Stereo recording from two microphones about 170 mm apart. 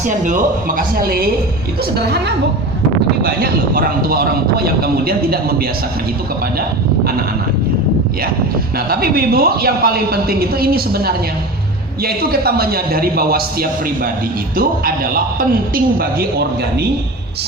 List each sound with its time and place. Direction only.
0.1 s speech: 50° right (ahead or behind)
2.0 s a woman's voice: 75° right (ahead or behind)
3.2 s speech: 60° right (ahead or behind)
8.9 s speech: 65° right (ahead or behind)